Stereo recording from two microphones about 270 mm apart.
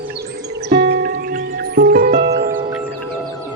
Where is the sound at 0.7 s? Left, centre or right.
Right.